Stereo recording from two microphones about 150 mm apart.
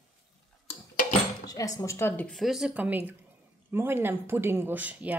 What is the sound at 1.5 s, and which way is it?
Chink, 20° left (ahead or behind).